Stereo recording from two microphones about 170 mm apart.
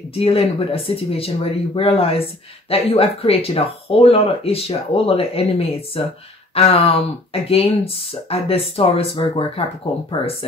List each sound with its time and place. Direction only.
0.1 s speech: 35° left (ahead or behind)